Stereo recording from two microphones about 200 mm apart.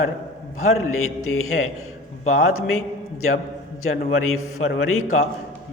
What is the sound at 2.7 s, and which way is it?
A man's voice, 90° left.